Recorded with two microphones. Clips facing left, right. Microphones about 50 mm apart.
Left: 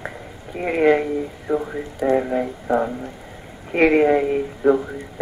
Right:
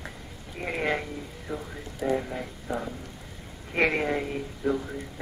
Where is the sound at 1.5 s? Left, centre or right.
Left.